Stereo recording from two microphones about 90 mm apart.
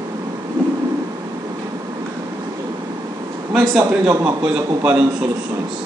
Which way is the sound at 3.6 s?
35° right (ahead or behind).